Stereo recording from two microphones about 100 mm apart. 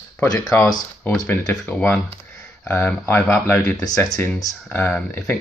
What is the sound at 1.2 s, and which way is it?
Speech, 15° left (ahead or behind).